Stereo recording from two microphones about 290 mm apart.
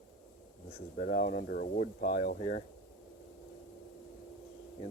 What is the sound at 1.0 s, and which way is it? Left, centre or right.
Speech, left.